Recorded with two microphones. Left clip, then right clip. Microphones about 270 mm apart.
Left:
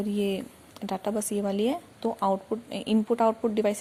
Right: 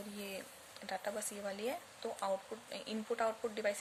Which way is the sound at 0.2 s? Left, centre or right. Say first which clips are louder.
Left 14 dB; left.